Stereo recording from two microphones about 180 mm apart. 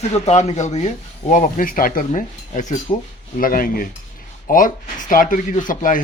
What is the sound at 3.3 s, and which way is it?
Speech, 50° left (ahead or behind).